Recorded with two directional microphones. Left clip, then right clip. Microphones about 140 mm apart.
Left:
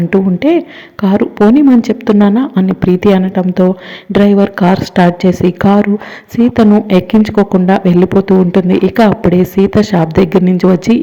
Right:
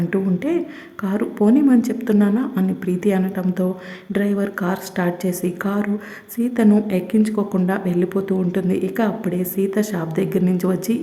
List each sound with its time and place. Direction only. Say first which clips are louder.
0.1 s speech: left 12 dB; 30° left (ahead or behind)